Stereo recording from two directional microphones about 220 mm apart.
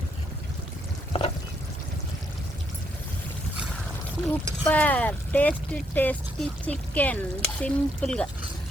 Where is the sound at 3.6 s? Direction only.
5° left (ahead or behind).